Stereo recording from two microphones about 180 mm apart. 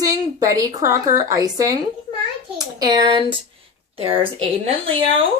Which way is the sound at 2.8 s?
25° right (ahead or behind).